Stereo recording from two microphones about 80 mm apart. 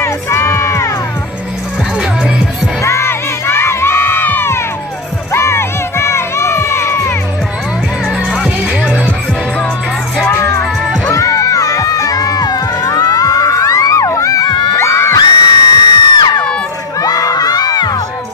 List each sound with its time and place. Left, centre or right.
0.0 s music: left
2.8 s crowd: left
8.8 s music: centre
10.3 s music: left
11.1 s music: left
14.8 s music: left
15.1 s crowd: left
17.0 s crowd: left